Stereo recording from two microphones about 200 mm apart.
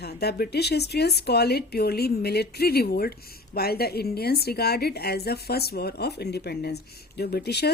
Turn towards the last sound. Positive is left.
turn(degrees=55)  # may be behind; listen again after turning